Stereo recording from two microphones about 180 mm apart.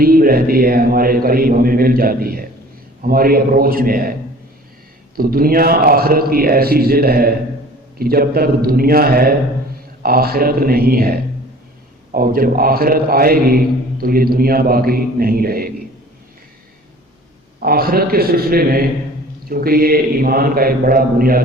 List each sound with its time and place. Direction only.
0.0 s a man's voice: 55° right (ahead or behind)
5.1 s a man's voice: 55° right (ahead or behind)
17.6 s a man's voice: 55° right (ahead or behind)